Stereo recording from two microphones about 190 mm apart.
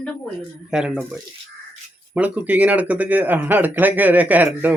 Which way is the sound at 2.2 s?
5° right (ahead or behind).